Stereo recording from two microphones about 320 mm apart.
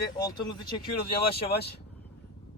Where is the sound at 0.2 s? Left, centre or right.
Centre.